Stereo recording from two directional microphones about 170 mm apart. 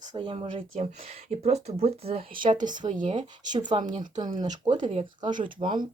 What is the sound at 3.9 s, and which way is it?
Speech, 25° right (ahead or behind).